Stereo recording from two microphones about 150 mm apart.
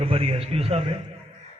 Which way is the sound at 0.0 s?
40° right (ahead or behind).